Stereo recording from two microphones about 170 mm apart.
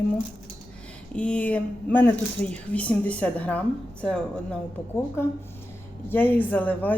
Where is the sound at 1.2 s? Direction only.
10° left (ahead or behind).